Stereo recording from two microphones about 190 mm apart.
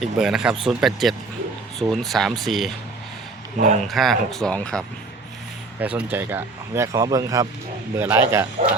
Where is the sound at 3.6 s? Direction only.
40° right (ahead or behind).